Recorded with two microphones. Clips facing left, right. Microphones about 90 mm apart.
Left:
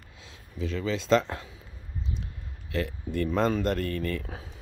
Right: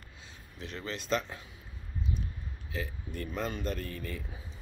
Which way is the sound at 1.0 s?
90° left.